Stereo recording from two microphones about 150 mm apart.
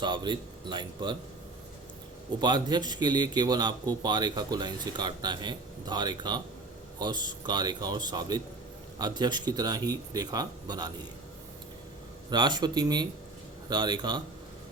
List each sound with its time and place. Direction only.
0.0 s speech: 30° right (ahead or behind)
2.4 s speech: 30° right (ahead or behind)
12.3 s speech: 30° right (ahead or behind)